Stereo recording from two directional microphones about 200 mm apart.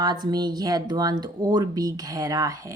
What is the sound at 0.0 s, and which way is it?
Speech, 20° right (ahead or behind).